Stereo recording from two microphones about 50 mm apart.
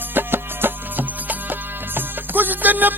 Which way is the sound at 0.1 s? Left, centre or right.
Right.